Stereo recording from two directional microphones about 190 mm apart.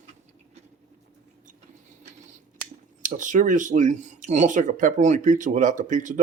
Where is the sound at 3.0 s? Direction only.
40° right (ahead or behind).